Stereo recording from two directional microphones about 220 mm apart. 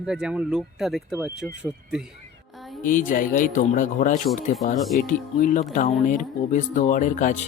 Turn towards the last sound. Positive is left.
turn(degrees=35)  # may be behind; listen again after turning